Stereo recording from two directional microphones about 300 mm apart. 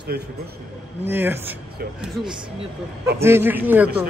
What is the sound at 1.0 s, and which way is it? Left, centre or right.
A woman's voice, centre.